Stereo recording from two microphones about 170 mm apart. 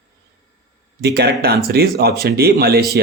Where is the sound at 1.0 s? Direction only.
70° right (ahead or behind).